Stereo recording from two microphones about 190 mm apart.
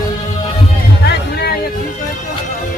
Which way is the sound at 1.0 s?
60° left (ahead or behind).